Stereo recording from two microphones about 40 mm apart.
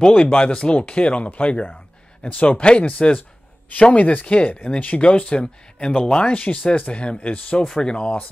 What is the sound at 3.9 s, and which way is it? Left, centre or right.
Speech, left.